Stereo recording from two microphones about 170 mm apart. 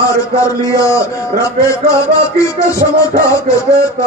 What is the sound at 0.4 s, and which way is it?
A man's voice, 20° left (ahead or behind).